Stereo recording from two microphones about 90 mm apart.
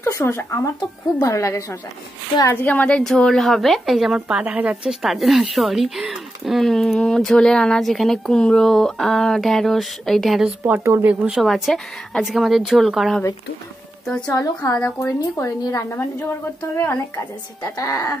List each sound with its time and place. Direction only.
0.0 s speech: 30° left (ahead or behind)
2.5 s speech: 15° left (ahead or behind); by 10.5 s centre (ahead or behind)
10.8 s speech: 30° right (ahead or behind)
11.2 s speech: 5° right (ahead or behind)
14.0 s speech: 10° left (ahead or behind)
14.3 s speech: 35° left (ahead or behind)